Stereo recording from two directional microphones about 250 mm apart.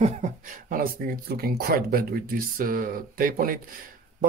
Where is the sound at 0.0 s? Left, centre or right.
Right.